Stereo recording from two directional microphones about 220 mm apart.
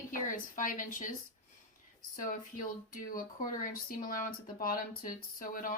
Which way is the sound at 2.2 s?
40° left (ahead or behind).